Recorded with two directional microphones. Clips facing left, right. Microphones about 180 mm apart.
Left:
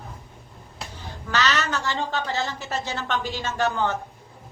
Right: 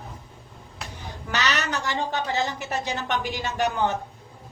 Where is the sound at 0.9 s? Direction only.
20° right (ahead or behind).